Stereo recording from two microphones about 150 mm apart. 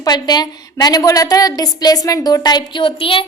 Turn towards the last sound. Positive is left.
turn(degrees=35)  # may be behind; listen again after turning